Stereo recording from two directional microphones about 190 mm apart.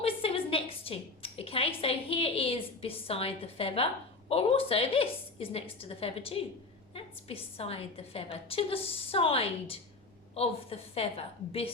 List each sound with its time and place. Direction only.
0.0 s a woman's voice: 30° left (ahead or behind)